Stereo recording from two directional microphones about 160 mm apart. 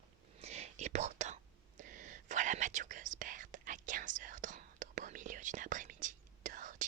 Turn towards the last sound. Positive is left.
turn(degrees=-55)  # may be behind; listen again after turning